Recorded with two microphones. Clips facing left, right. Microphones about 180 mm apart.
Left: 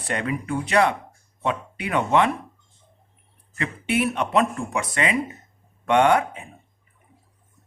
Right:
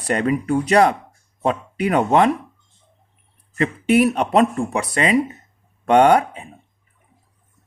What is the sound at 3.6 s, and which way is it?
Speech, 40° right (ahead or behind).